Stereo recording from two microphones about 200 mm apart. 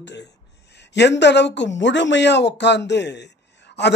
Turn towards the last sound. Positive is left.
turn(degrees=60)  # may be behind; listen again after turning